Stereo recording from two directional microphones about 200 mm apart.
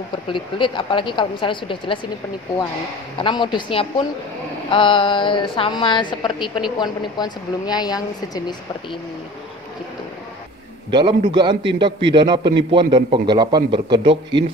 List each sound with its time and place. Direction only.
0.3 s speech: 25° left (ahead or behind)
3.2 s speech: 25° left (ahead or behind)
10.9 s a man's voice: 25° right (ahead or behind)